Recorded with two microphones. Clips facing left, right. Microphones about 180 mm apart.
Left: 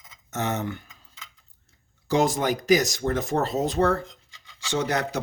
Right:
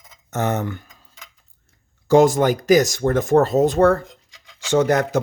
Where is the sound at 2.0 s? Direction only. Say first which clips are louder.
Right 8 dB; 50° right (ahead or behind).